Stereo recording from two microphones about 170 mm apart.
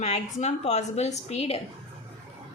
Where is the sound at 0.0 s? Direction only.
40° left (ahead or behind).